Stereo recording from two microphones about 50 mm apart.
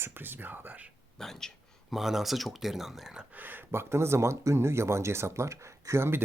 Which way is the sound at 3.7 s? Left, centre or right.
Right.